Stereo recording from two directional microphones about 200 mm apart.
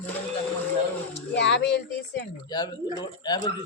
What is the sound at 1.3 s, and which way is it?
Speech, 60° left (ahead or behind).